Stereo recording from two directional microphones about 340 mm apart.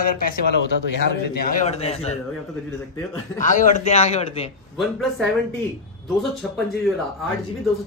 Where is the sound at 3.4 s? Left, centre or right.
Left.